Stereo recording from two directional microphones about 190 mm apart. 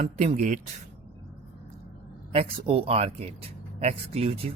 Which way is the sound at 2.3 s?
30° right (ahead or behind).